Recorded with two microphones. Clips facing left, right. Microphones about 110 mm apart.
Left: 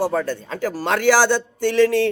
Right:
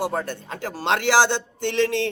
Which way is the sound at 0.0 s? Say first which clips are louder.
Left 5 dB; 20° right (ahead or behind).